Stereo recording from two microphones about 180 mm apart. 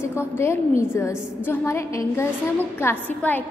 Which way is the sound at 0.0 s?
15° left (ahead or behind).